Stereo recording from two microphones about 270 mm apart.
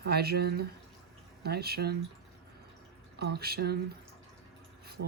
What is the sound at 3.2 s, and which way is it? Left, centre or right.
Speech, right.